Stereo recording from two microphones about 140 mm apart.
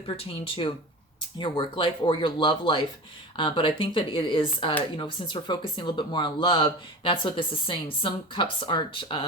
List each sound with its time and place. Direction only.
0.0 s speech: 40° left (ahead or behind)